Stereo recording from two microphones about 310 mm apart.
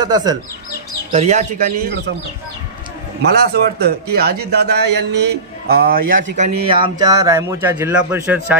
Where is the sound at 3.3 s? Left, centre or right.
Right.